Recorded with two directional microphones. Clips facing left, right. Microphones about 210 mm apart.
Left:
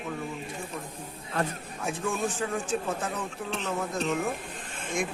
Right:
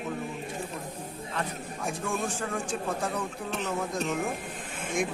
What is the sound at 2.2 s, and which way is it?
Speech, 10° right (ahead or behind).